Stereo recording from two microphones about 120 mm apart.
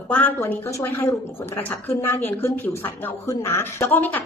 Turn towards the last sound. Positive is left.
turn(degrees=15)  # may be behind; listen again after turning